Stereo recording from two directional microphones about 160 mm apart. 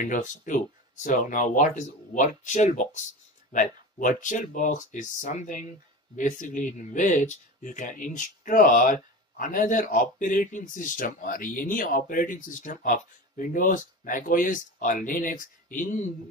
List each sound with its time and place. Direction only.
0.0 s speech: 55° left (ahead or behind)